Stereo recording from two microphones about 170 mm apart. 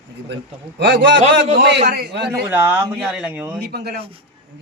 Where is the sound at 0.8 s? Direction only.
90° right.